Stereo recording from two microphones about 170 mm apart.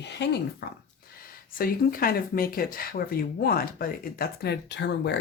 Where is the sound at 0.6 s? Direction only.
70° left (ahead or behind).